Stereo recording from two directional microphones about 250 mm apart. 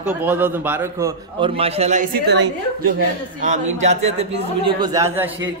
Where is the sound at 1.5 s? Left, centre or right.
Right.